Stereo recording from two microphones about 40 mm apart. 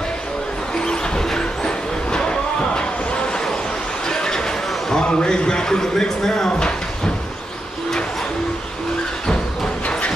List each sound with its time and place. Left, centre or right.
0.7 s music: centre
2.7 s a sound: left
9.8 s music: left